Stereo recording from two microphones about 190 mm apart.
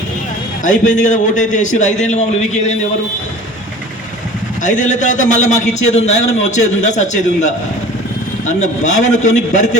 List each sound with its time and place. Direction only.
0.6 s a man's voice: 40° left (ahead or behind)
4.6 s a man's voice: 40° left (ahead or behind)